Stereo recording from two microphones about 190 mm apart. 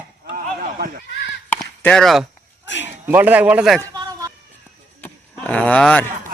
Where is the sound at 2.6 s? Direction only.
70° left (ahead or behind).